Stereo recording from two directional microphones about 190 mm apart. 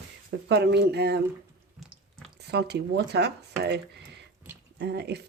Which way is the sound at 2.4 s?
60° right (ahead or behind).